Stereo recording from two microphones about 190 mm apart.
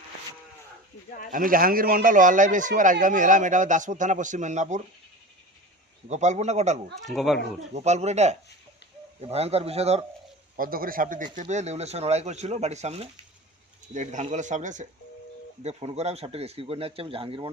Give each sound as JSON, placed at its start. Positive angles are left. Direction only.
{"t": 1.3, "sound": "speech", "side_deg": -45}
{"t": 6.1, "sound": "speech", "side_deg": -40}
{"t": 7.0, "sound": "speech", "side_deg": 0}
{"t": 7.7, "sound": "speech", "side_deg": -35}
{"t": 10.6, "sound": "speech", "side_deg": -50}